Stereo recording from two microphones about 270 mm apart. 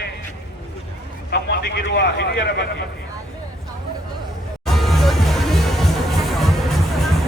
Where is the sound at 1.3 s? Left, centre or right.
Left.